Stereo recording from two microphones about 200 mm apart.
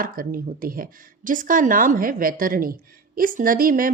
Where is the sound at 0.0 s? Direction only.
45° right (ahead or behind).